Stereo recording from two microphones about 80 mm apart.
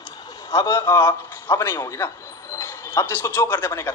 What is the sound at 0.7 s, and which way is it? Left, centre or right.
Speech, left.